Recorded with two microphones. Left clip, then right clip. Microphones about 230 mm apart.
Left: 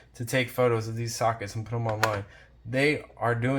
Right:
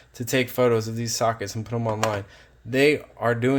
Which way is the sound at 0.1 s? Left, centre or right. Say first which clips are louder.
Right 4 dB; right.